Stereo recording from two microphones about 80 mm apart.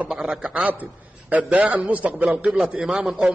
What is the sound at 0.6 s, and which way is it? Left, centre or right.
A man's voice, centre.